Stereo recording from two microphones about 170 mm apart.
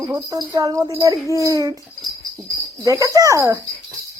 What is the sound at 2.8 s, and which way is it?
Speech, 20° right (ahead or behind).